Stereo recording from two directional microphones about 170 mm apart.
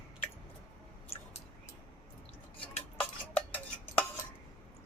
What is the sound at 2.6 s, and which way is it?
Cutlery, 10° left (ahead or behind).